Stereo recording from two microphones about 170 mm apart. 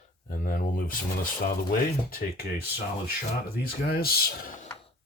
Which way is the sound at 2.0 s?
60° left (ahead or behind).